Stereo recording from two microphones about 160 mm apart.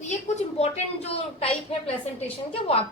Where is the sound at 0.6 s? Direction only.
40° left (ahead or behind).